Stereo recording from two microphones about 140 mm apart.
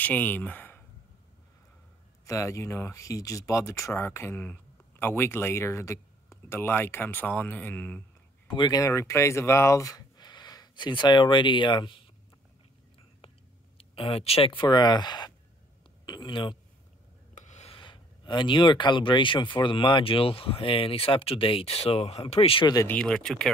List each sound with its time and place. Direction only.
0.0 s speech: 10° left (ahead or behind)
2.2 s speech: 20° left (ahead or behind)
8.5 s speech: 30° left (ahead or behind)
13.7 s speech: 40° left (ahead or behind)
16.1 s a sound: 35° left (ahead or behind)
17.3 s rub: 55° left (ahead or behind)
17.7 s speech: 35° left (ahead or behind)
22.8 s speech: 5° left (ahead or behind)